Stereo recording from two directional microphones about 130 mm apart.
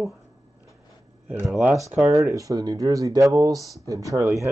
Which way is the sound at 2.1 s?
25° right (ahead or behind).